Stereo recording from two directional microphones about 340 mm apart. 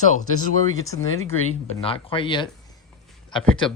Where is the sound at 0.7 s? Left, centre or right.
Centre.